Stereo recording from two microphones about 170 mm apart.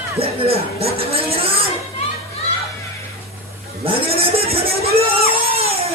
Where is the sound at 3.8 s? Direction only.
35° right (ahead or behind).